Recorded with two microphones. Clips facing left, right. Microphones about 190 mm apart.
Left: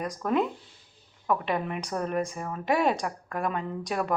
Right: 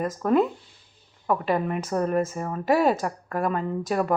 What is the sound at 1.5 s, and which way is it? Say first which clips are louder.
Speech: right 5 dB; centre (ahead or behind).